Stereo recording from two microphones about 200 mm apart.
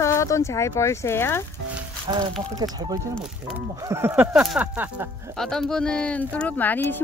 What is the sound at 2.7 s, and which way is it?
Speech, 20° right (ahead or behind).